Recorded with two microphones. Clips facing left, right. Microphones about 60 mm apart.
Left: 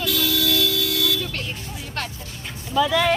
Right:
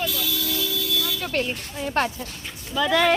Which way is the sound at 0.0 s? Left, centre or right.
Left.